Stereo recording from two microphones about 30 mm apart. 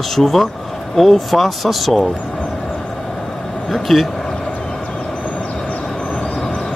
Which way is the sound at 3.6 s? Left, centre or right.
Centre.